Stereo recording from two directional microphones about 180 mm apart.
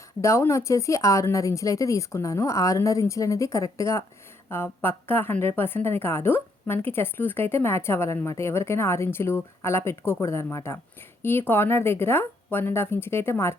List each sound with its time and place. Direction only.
0.2 s a woman's voice: 15° left (ahead or behind)